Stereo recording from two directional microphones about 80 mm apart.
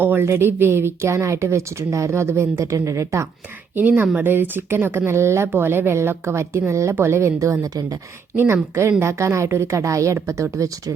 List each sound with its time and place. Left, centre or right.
0.0 s speech: right
3.8 s a woman's voice: right
9.0 s speech: right